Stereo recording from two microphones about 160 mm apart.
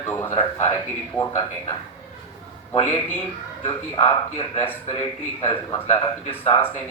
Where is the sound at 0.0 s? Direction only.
20° left (ahead or behind).